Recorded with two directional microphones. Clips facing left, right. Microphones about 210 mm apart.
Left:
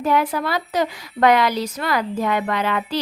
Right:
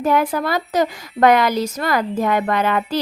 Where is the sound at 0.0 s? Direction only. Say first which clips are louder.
Right 2 dB; 45° right (ahead or behind).